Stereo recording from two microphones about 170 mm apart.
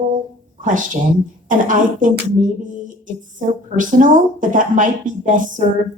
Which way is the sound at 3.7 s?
50° right (ahead or behind).